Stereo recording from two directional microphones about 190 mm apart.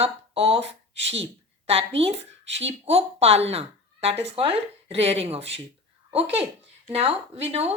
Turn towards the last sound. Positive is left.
turn(degrees=-35)  # may be behind; listen again after turning